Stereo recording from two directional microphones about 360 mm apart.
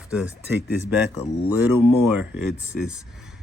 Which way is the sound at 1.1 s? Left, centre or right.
Left.